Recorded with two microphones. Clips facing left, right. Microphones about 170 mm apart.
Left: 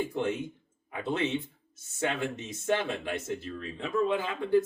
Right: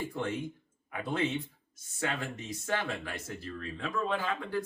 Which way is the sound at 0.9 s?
25° left (ahead or behind).